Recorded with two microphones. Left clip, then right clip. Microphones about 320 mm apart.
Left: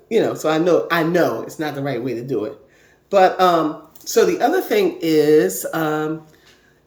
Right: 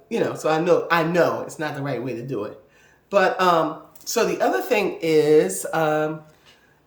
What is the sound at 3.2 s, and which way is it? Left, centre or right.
Speech, centre.